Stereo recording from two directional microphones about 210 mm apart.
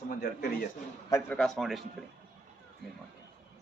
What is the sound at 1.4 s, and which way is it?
Speech, centre (ahead or behind).